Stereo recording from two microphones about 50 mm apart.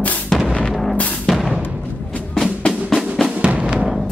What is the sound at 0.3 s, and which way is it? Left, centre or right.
Artillery fire, centre.